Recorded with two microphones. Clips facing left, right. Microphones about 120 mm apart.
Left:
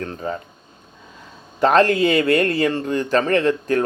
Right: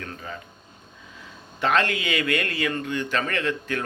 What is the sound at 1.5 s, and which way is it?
Speech, 40° left (ahead or behind).